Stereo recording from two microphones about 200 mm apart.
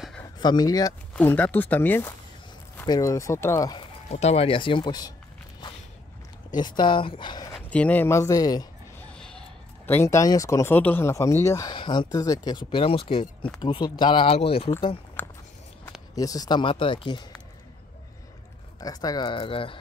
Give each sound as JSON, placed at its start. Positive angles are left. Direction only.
{"t": 0.4, "sound": "speech", "side_deg": 20}
{"t": 1.1, "sound": "speech", "side_deg": 10}
{"t": 4.1, "sound": "speech", "side_deg": 35}
{"t": 6.5, "sound": "speech", "side_deg": 20}
{"t": 7.5, "sound": "speech", "side_deg": 5}
{"t": 9.1, "sound": "creak", "side_deg": 5}
{"t": 9.8, "sound": "speech", "side_deg": 10}
{"t": 15.2, "sound": "a sound", "side_deg": 10}
{"t": 16.2, "sound": "speech", "side_deg": 20}
{"t": 18.8, "sound": "speech", "side_deg": 20}